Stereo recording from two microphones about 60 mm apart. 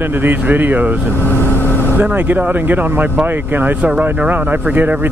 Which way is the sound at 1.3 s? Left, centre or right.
Left.